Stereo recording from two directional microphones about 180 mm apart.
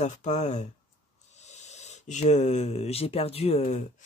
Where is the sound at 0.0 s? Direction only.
40° left (ahead or behind).